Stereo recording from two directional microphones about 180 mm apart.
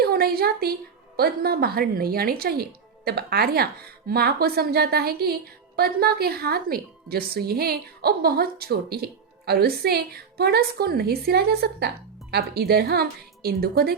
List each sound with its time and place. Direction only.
0.0 s speech: 60° right (ahead or behind)